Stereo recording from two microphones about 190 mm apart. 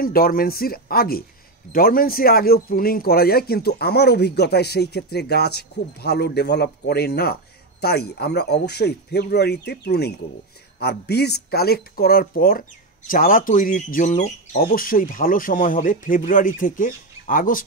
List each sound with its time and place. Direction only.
0.0 s speech: 50° left (ahead or behind)